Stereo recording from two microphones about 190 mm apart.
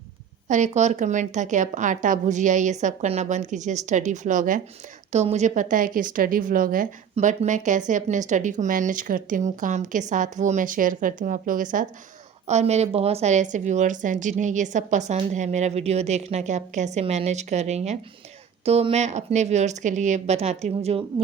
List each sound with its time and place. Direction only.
0.4 s a woman's voice: 40° right (ahead or behind)